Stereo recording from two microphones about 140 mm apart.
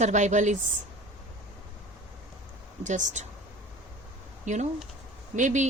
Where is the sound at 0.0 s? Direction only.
60° right (ahead or behind).